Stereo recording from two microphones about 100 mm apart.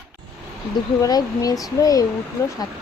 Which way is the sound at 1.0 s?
40° left (ahead or behind).